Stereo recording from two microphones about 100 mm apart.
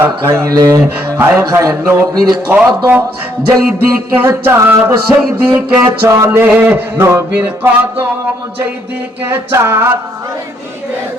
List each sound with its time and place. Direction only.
0.0 s speech: 25° right (ahead or behind)
1.2 s music: 25° right (ahead or behind)
4.3 s music: 30° right (ahead or behind)
5.0 s music: 20° right (ahead or behind)
6.1 s speech: 30° right (ahead or behind)
6.4 s music: 15° right (ahead or behind)
6.9 s music: 30° right (ahead or behind)
9.2 s music: 25° right (ahead or behind)